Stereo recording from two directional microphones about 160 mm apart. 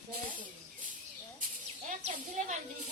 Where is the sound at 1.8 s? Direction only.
50° right (ahead or behind).